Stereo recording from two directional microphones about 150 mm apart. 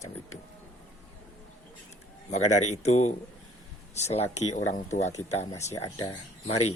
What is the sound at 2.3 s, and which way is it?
Speech, 50° left (ahead or behind).